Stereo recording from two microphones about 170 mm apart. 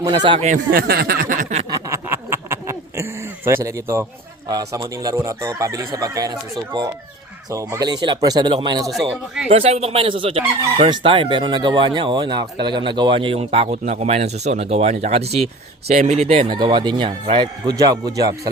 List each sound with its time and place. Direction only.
0.0 s speech: 25° right (ahead or behind)
0.4 s speech: 50° right (ahead or behind)
1.7 s a sound: 15° right (ahead or behind)
4.4 s speech: 20° right (ahead or behind)